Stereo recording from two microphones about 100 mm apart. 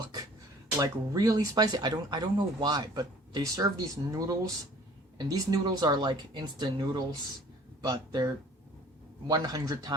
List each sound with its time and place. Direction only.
0.8 s speech: 40° right (ahead or behind)